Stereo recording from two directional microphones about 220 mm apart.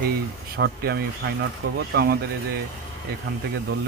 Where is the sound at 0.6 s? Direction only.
45° right (ahead or behind).